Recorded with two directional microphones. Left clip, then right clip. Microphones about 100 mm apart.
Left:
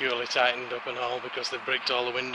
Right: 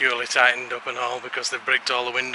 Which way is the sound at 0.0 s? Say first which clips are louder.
Right 6 dB; 25° right (ahead or behind).